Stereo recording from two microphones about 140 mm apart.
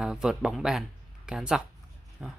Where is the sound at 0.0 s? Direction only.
5° right (ahead or behind).